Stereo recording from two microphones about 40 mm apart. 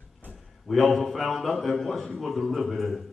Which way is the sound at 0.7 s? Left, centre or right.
Centre.